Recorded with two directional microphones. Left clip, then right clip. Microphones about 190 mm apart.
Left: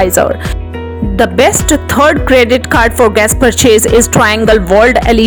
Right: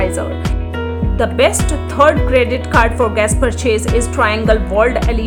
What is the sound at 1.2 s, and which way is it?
Speech, 45° left (ahead or behind).